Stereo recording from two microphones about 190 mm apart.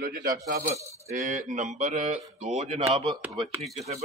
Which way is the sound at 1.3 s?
40° right (ahead or behind).